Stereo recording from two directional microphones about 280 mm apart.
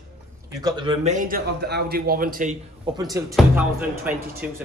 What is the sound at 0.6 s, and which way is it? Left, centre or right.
Speech, centre.